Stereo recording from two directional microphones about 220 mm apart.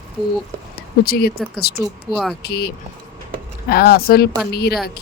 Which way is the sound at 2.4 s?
45° left (ahead or behind).